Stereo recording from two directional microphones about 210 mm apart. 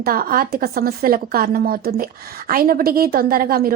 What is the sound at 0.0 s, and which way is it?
A woman's voice, 45° right (ahead or behind).